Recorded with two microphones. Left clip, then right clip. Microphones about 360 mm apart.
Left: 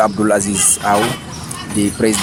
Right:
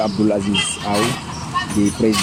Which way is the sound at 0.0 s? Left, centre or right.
Left.